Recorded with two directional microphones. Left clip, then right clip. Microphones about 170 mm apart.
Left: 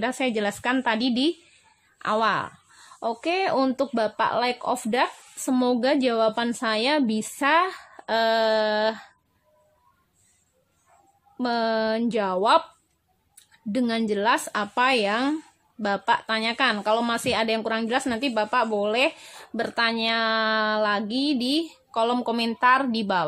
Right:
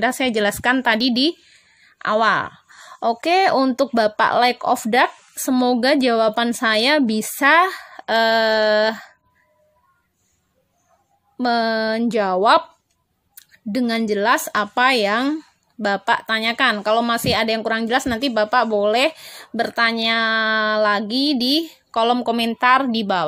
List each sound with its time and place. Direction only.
0.0 s a woman's voice: 30° right (ahead or behind)
11.3 s speech: 30° right (ahead or behind)